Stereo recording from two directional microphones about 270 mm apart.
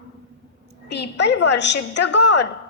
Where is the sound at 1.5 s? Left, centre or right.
Left.